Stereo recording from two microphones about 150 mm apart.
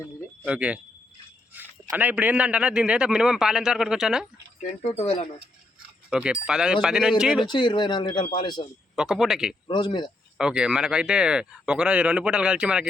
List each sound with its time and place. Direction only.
0.4 s a man's voice: 10° right (ahead or behind)
4.6 s speech: 45° left (ahead or behind)
6.1 s a man's voice: 5° right (ahead or behind)
7.4 s speech: 30° left (ahead or behind)
9.0 s a man's voice: 5° right (ahead or behind)
9.6 s speech: 30° left (ahead or behind)
10.3 s a man's voice: 5° right (ahead or behind)